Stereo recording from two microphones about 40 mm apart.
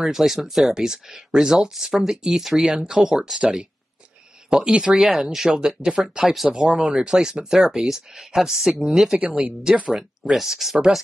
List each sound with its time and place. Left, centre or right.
0.0 s speech: centre
0.7 s speech: centre
9.2 s speech: right
9.8 s speech: right
10.3 s speech: centre